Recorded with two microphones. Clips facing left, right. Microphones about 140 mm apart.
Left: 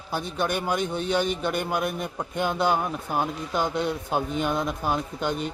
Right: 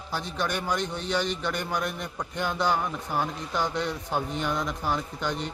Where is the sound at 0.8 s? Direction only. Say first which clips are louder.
Left 4 dB; 55° left (ahead or behind).